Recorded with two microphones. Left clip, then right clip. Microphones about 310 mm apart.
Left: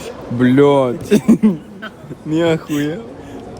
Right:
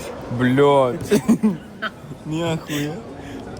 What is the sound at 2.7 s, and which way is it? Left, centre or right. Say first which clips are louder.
Speech: left 6 dB; centre.